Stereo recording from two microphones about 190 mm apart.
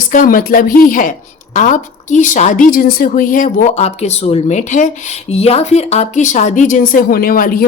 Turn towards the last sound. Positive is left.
turn(degrees=50)  # may be behind; listen again after turning